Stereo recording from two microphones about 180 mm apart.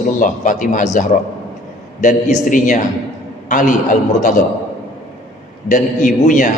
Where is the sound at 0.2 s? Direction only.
45° left (ahead or behind).